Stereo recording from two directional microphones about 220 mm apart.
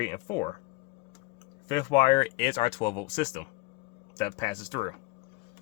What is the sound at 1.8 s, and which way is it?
Speech, 25° left (ahead or behind).